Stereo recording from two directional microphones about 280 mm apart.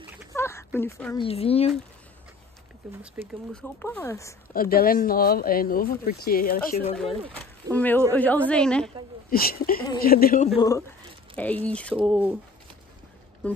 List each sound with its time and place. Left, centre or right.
0.3 s a sound: centre
0.7 s speech: centre
1.1 s speech: left
2.8 s a woman's voice: centre
4.6 s speech: left
7.7 s a woman's voice: centre
9.3 s speech: left
11.3 s a woman's voice: centre